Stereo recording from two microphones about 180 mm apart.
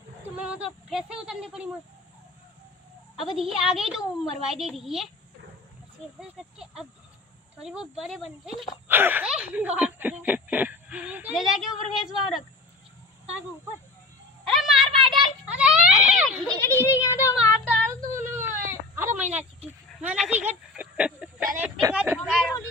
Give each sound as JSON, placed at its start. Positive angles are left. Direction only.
{"t": 0.3, "sound": "speech", "side_deg": -5}
{"t": 3.2, "sound": "a woman's voice", "side_deg": 0}
{"t": 6.1, "sound": "a woman's voice", "side_deg": -5}
{"t": 14.4, "sound": "a sound", "side_deg": 0}
{"t": 16.6, "sound": "a child's voice", "side_deg": 15}
{"t": 18.1, "sound": "whimper", "side_deg": -15}
{"t": 20.0, "sound": "a sound", "side_deg": -5}
{"t": 21.6, "sound": "speech", "side_deg": -15}
{"t": 22.2, "sound": "a woman's voice", "side_deg": 0}